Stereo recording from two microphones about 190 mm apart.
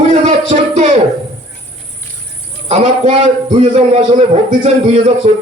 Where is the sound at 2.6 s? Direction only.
35° right (ahead or behind).